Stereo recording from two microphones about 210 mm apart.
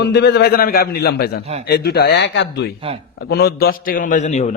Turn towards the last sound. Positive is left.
turn(degrees=35)  # may be behind; listen again after turning